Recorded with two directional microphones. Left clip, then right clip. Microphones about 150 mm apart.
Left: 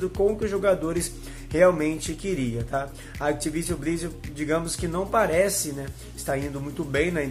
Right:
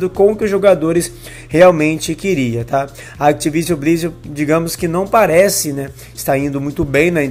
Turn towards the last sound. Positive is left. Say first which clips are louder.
# right 12 dB
turn(degrees=-40)  # may be behind; listen again after turning